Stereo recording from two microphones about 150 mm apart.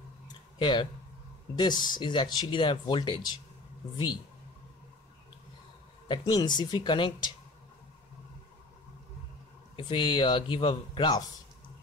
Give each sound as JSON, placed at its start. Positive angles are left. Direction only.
{"t": 0.6, "sound": "a man's voice", "side_deg": 35}
{"t": 6.0, "sound": "a man's voice", "side_deg": 30}
{"t": 9.8, "sound": "a man's voice", "side_deg": 35}